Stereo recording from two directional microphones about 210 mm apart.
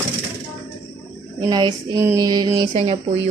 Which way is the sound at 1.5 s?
20° right (ahead or behind).